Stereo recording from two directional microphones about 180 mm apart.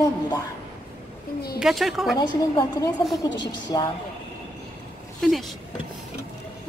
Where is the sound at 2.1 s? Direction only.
25° left (ahead or behind).